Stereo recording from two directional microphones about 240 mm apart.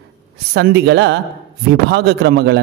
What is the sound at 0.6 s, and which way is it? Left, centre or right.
A man's voice, right.